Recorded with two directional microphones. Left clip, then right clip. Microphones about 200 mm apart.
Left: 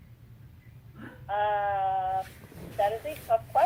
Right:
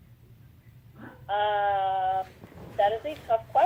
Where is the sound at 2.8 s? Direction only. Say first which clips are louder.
Right 3 dB; 35° right (ahead or behind).